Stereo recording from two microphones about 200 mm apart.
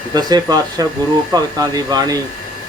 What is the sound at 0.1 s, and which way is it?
Speech, 20° right (ahead or behind).